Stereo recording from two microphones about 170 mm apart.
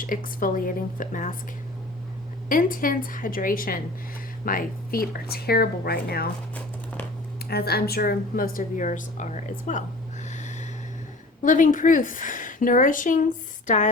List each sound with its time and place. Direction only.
0.0 s a woman's voice: 55° left (ahead or behind)
2.5 s speech: 55° left (ahead or behind)
7.4 s speech: 70° left (ahead or behind); by 9.8 s 45° left (ahead or behind)
10.2 s snort: 45° left (ahead or behind)
11.4 s a woman's voice: 50° left (ahead or behind)